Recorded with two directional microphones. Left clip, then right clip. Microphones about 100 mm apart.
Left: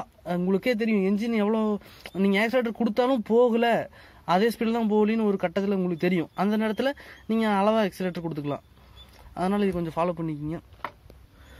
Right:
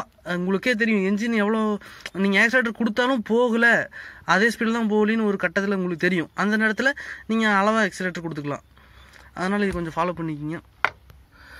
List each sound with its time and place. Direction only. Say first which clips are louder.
0.2 s speech: right 2 dB; 10° left (ahead or behind)